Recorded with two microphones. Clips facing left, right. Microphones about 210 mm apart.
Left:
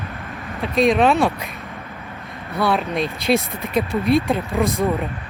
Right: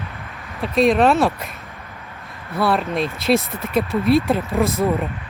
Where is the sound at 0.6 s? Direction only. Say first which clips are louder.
Right 1 dB; centre (ahead or behind).